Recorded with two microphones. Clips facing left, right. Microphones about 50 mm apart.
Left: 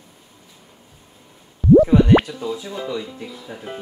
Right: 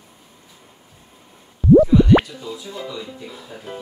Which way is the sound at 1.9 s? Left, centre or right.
Left.